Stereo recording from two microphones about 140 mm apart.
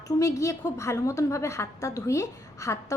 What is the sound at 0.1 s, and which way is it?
A woman's voice, 25° left (ahead or behind).